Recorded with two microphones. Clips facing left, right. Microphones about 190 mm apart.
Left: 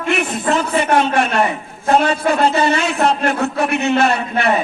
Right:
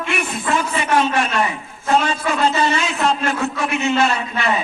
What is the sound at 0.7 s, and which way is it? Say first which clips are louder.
A man's voice: left 3 dB; 60° left (ahead or behind).